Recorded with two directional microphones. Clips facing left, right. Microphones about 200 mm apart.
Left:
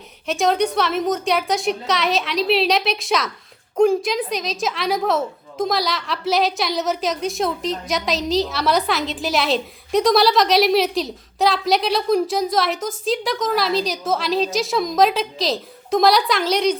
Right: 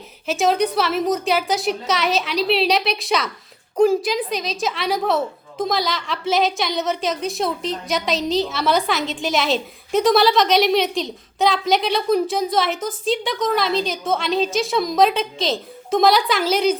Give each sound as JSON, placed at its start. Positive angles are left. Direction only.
{"t": 0.3, "sound": "a woman's voice", "side_deg": 0}